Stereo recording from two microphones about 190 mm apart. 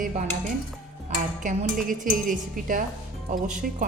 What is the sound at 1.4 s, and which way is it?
A woman's voice, 45° right (ahead or behind).